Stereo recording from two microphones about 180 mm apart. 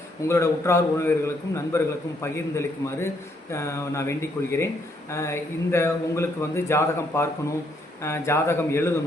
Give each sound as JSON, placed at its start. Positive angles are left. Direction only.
{"t": 0.3, "sound": "speech", "side_deg": 15}